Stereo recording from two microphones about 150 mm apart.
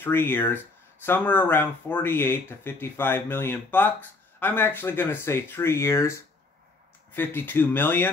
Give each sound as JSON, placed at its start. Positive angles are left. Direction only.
{"t": 0.0, "sound": "speech", "side_deg": 15}